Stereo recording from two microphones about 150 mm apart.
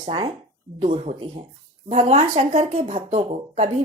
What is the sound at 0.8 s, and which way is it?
Speech, 45° right (ahead or behind).